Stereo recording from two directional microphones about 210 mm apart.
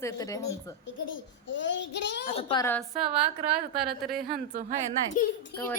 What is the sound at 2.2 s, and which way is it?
Speech, 30° left (ahead or behind).